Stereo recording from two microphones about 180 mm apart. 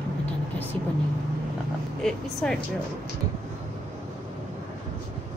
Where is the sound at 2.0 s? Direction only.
Centre (ahead or behind).